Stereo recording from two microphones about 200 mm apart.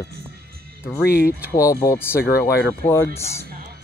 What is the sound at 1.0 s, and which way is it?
Speech, 50° left (ahead or behind).